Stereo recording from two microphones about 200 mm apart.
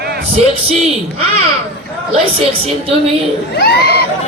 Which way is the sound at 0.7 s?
30° right (ahead or behind).